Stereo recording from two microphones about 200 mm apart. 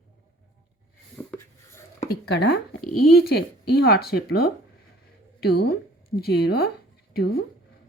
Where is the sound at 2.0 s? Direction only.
55° left (ahead or behind).